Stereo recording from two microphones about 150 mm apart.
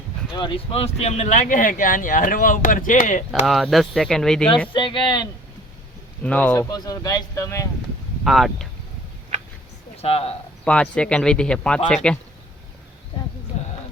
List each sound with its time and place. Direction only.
0.3 s speech: 35° left (ahead or behind); by 3.4 s 55° left (ahead or behind)
3.4 s speech: centre (ahead or behind)
4.7 s speech: 35° left (ahead or behind)
6.2 s speech: 10° left (ahead or behind)
6.7 s speech: 25° left (ahead or behind)
8.2 s speech: centre (ahead or behind)
10.0 s speech: 40° left (ahead or behind)
10.7 s speech: 5° left (ahead or behind)
13.5 s a sound: 50° left (ahead or behind)